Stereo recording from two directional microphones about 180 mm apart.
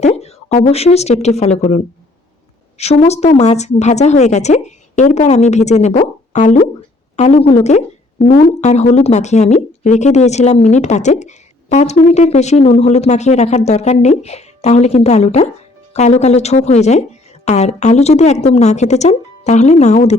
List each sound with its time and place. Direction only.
0.0 s a woman's voice: 35° left (ahead or behind)